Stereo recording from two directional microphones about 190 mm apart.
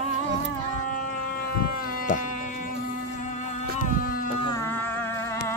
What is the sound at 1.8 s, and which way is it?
Insect, 45° left (ahead or behind).